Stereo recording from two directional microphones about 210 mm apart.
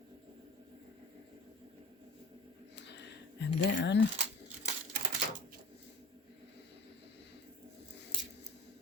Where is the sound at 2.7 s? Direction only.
55° left (ahead or behind).